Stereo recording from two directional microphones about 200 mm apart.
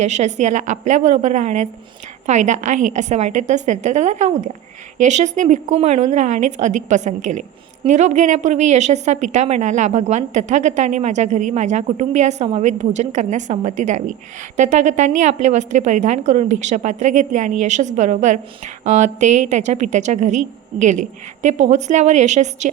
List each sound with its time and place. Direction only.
0.0 s a woman's voice: 35° right (ahead or behind)